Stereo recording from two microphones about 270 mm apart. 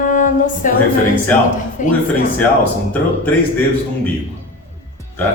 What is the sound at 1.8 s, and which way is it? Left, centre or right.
Speech, left.